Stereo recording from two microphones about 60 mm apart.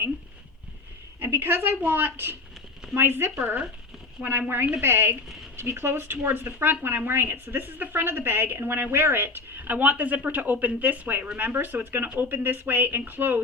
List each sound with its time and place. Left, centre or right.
1.2 s speech: right
12.0 s speech: right
12.3 s speech: right